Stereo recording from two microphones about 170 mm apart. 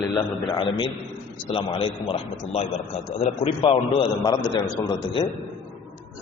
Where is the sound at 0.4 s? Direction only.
30° left (ahead or behind).